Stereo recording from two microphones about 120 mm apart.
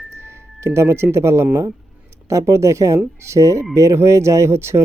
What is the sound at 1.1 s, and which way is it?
Speech, 25° right (ahead or behind).